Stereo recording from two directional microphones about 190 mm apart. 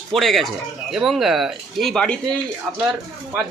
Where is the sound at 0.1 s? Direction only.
Centre (ahead or behind).